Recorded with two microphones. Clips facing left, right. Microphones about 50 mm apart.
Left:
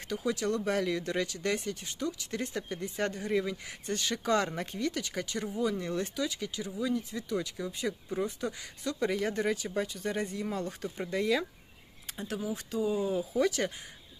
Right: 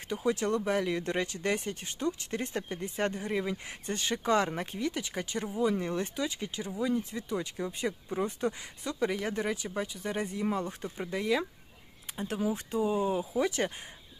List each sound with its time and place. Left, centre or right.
0.1 s speech: right
0.6 s speech: centre
3.6 s speech: right
9.0 s speech: centre
12.4 s speech: right
12.7 s speech: right